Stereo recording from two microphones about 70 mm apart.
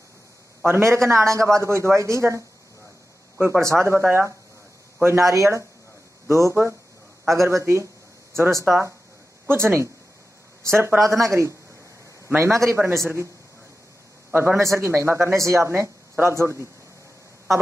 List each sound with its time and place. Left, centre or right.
0.7 s a man's voice: right
3.3 s speech: right
5.3 s a man's voice: right
11.0 s a man's voice: right
14.3 s speech: right